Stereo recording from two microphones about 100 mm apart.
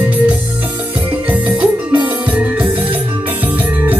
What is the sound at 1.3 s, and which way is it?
Music, 15° right (ahead or behind).